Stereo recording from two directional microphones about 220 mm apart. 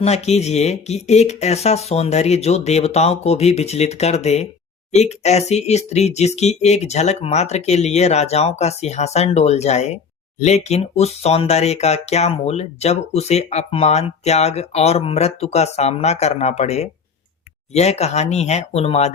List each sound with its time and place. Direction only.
0.0 s speech: 30° left (ahead or behind)